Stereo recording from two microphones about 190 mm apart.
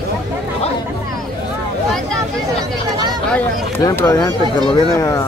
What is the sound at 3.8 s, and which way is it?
Speech, 15° left (ahead or behind).